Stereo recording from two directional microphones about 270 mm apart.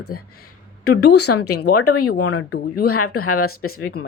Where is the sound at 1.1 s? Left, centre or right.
Left.